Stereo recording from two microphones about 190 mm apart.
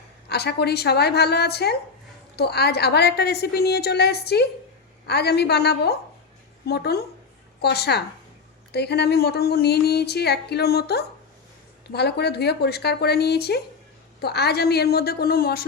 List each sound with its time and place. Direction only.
0.3 s speech: 60° left (ahead or behind)